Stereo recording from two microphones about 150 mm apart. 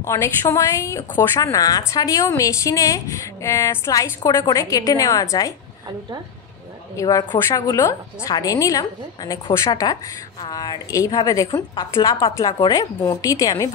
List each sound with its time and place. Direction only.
0.0 s a woman's voice: 15° left (ahead or behind)
7.0 s a woman's voice: 25° left (ahead or behind)